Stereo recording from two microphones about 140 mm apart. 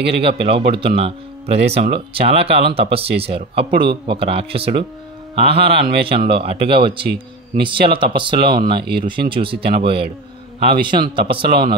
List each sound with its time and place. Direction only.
0.1 s speech: 40° right (ahead or behind)